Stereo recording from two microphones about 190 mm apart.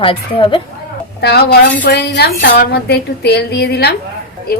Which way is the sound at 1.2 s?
60° left (ahead or behind).